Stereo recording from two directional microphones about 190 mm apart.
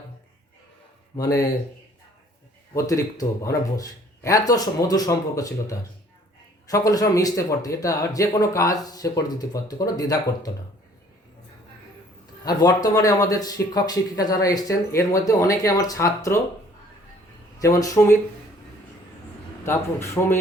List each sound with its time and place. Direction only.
1.1 s speech: 20° left (ahead or behind)
2.7 s speech: 15° left (ahead or behind)
12.5 s speech: 20° left (ahead or behind)
17.6 s speech: 15° left (ahead or behind)
19.6 s speech: 15° left (ahead or behind)